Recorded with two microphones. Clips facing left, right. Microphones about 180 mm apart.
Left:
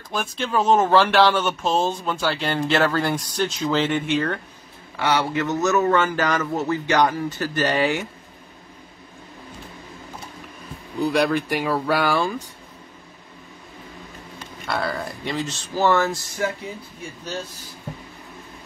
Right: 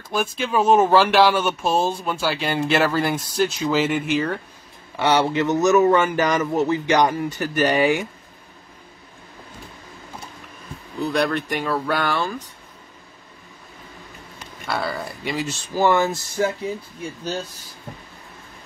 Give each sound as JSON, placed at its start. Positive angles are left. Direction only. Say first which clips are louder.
{"t": 0.4, "sound": "speech", "louder": "right 2 dB", "side_deg": -10}
{"t": 4.9, "sound": "speech", "louder": "right 3 dB", "side_deg": -20}
{"t": 11.1, "sound": "speech", "louder": "left 1 dB", "side_deg": 10}
{"t": 14.7, "sound": "speech", "louder": "even", "side_deg": 0}